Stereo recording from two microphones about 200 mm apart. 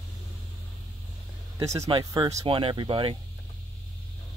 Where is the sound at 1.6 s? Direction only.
15° right (ahead or behind).